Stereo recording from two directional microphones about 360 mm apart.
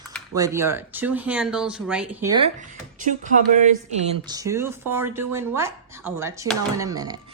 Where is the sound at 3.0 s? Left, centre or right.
Right.